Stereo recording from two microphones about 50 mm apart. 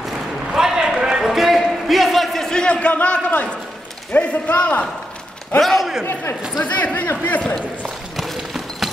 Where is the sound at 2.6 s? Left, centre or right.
Left.